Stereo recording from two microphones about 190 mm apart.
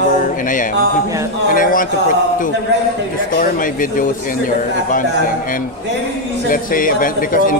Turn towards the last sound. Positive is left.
turn(degrees=45)  # may be behind; listen again after turning